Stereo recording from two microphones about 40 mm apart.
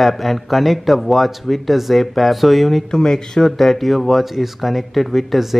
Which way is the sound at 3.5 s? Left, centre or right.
Centre.